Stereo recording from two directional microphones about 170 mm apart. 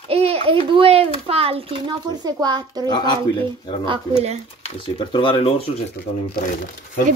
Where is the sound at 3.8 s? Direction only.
35° right (ahead or behind).